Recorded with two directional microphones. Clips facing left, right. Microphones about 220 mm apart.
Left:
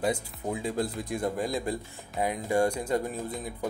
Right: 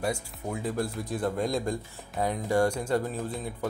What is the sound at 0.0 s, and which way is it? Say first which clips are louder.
Speech: left 2 dB; 20° left (ahead or behind).